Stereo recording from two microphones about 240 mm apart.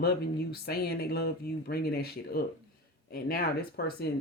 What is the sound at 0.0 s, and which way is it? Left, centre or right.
Speech, left.